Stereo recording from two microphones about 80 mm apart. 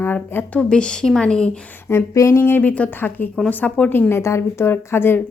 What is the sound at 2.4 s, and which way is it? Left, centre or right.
Speech, left.